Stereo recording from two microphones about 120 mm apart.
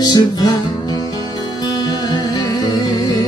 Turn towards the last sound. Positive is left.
turn(degrees=35)  # may be behind; listen again after turning